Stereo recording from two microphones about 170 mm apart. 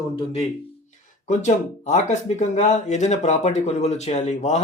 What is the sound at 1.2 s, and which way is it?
Speech, 45° left (ahead or behind).